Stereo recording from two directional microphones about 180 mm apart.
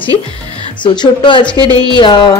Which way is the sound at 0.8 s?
25° left (ahead or behind).